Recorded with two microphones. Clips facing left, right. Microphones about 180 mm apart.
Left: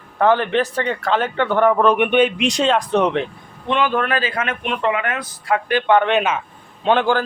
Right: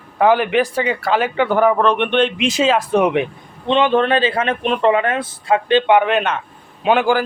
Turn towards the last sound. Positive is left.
turn(degrees=-10)  # may be behind; listen again after turning